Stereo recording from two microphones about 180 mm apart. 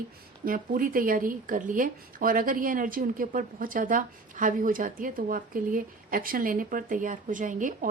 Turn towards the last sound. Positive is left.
turn(degrees=-45)  # may be behind; listen again after turning